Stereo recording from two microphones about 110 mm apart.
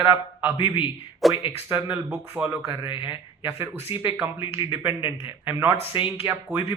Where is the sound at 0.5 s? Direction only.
50° left (ahead or behind).